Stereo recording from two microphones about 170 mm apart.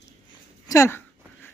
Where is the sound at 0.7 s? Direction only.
15° left (ahead or behind).